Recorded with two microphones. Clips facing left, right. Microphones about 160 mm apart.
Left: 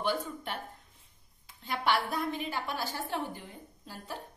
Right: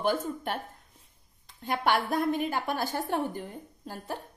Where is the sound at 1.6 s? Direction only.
50° right (ahead or behind).